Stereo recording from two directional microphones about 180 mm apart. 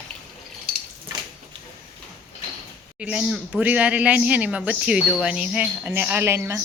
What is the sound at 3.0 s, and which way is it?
A man's voice, 5° right (ahead or behind).